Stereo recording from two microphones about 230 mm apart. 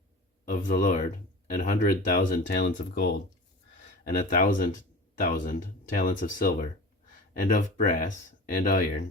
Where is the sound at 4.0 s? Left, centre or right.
Left.